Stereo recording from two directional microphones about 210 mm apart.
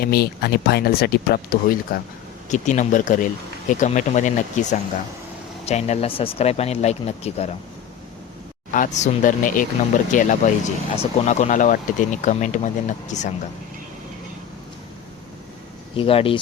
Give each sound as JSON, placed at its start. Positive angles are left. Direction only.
{"t": 0.0, "sound": "speech", "side_deg": 50}
{"t": 2.5, "sound": "speech", "side_deg": 35}
{"t": 8.7, "sound": "speech", "side_deg": 40}
{"t": 16.0, "sound": "speech", "side_deg": 25}